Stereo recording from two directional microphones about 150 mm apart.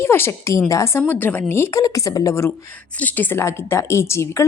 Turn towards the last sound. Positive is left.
turn(degrees=20)  # may be behind; listen again after turning